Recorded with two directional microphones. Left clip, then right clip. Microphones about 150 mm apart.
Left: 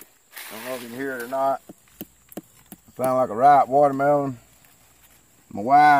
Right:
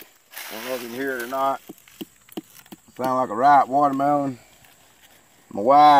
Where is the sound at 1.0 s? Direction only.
25° left (ahead or behind).